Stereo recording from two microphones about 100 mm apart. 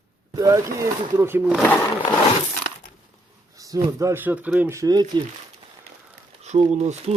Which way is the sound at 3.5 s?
35° right (ahead or behind).